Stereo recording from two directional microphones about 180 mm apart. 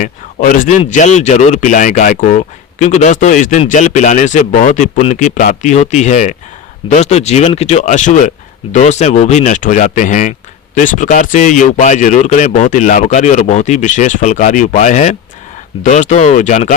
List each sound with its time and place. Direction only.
0.0 s speech: 45° left (ahead or behind)